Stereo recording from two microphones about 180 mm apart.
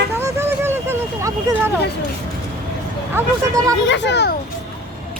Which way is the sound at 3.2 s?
15° right (ahead or behind).